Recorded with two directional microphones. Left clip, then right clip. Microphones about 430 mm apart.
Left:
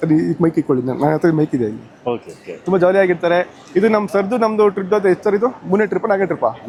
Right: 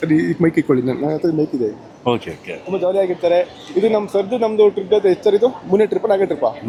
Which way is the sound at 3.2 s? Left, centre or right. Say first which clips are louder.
Right 1 dB; left.